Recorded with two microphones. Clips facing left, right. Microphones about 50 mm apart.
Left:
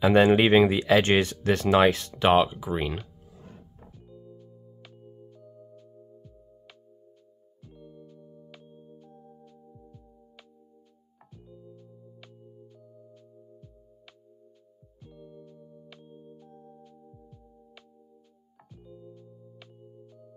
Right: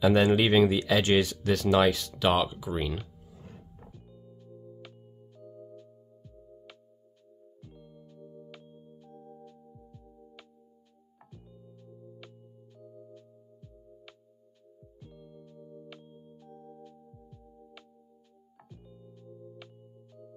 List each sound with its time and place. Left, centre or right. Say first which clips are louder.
0.0 s speech: left 4 dB; left
3.8 s music: left 3 dB; centre
7.6 s music: left 5 dB; centre